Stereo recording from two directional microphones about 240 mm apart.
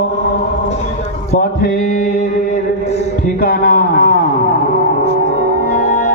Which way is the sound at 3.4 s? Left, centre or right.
Left.